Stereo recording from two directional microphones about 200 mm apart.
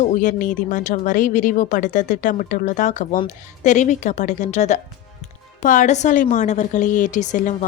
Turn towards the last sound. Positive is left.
turn(degrees=40)  # may be behind; listen again after turning